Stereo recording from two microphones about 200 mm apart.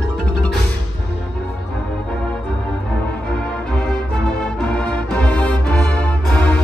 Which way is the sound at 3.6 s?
5° left (ahead or behind).